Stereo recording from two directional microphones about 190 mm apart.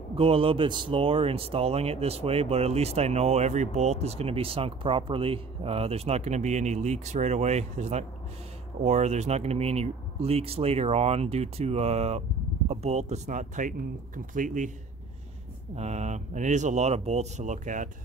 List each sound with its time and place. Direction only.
0.1 s speech: 30° right (ahead or behind)
15.7 s speech: 35° right (ahead or behind)